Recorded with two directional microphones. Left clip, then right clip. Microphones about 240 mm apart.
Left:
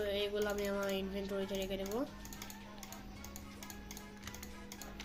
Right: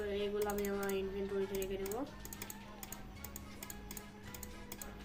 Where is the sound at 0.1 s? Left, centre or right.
Left.